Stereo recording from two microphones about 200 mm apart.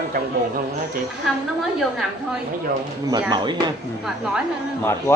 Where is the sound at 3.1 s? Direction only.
20° right (ahead or behind).